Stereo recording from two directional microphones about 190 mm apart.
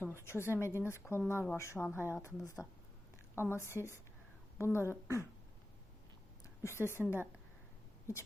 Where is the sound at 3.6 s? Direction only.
15° left (ahead or behind).